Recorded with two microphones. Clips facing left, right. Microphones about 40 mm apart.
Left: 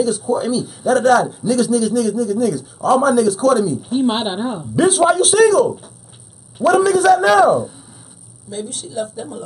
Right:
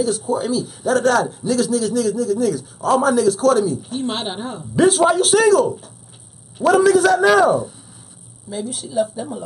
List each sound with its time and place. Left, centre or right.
0.0 s a man's voice: centre
3.9 s a woman's voice: centre
4.7 s a man's voice: centre
8.5 s a man's voice: centre